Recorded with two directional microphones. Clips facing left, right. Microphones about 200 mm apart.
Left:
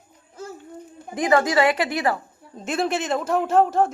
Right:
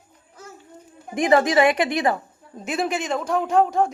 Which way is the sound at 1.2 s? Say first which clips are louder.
Right 2 dB; 20° right (ahead or behind).